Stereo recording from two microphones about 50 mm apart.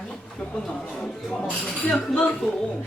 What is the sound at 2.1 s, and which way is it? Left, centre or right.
Speech, left.